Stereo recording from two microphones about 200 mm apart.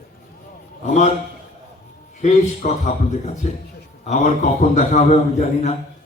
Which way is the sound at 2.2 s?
35° left (ahead or behind).